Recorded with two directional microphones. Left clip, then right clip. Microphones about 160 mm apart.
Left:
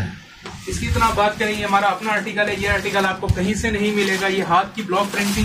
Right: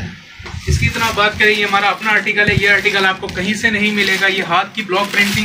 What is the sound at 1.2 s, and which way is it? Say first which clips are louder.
Speech: right 7 dB; 15° left (ahead or behind).